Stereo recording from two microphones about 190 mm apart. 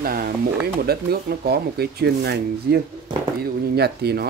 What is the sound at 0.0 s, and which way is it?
Speech, 50° right (ahead or behind).